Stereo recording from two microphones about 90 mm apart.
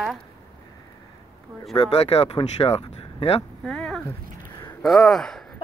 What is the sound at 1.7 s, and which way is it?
Speech, 90° left.